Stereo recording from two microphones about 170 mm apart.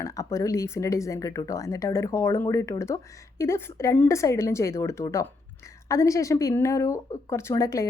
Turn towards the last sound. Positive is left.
turn(degrees=20)  # may be behind; listen again after turning